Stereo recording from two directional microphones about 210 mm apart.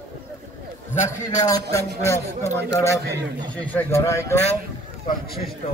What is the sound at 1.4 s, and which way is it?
A man's voice, 15° left (ahead or behind).